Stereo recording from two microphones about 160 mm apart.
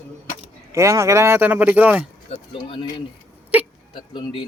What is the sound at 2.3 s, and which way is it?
Speech, 35° left (ahead or behind).